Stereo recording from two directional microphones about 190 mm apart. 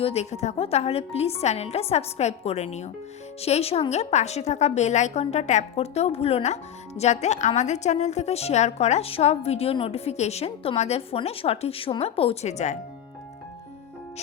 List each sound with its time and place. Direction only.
0.0 s a woman's voice: 35° left (ahead or behind)